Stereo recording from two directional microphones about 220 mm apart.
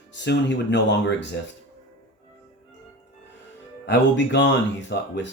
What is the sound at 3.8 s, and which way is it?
Speech, 50° left (ahead or behind).